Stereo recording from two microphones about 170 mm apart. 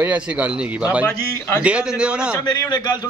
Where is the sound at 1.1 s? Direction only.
15° left (ahead or behind).